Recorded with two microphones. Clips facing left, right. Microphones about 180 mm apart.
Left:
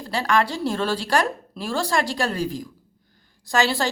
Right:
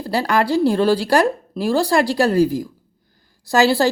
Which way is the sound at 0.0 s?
35° right (ahead or behind).